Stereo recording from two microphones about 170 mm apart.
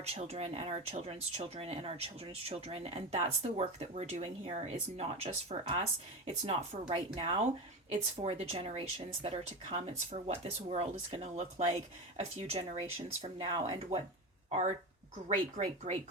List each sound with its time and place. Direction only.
0.0 s speech: 40° right (ahead or behind)
15.5 s speech: 40° right (ahead or behind)